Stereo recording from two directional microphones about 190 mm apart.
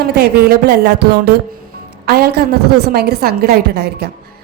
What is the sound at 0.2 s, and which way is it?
A woman's voice, 55° right (ahead or behind).